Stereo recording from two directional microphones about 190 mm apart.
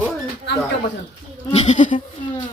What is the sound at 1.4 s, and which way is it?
Speech, 35° left (ahead or behind).